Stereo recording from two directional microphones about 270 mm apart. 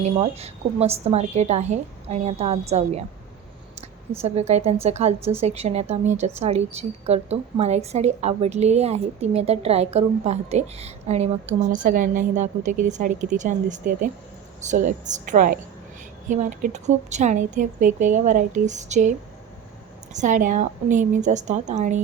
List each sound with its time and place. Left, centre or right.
0.0 s a woman's voice: right
4.2 s a woman's voice: right
20.1 s a woman's voice: right